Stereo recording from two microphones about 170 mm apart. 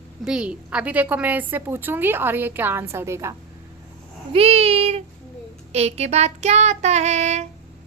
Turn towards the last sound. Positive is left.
turn(degrees=-40)  # may be behind; listen again after turning